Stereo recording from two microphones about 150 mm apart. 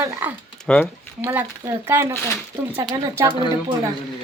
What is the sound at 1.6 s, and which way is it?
Speech, 20° right (ahead or behind).